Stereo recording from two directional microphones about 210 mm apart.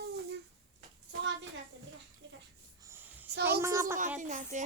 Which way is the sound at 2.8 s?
10° right (ahead or behind).